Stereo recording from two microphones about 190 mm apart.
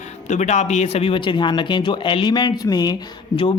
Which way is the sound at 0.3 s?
40° left (ahead or behind).